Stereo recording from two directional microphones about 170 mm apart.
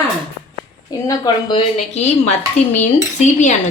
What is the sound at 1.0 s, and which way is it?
Speech, 25° left (ahead or behind).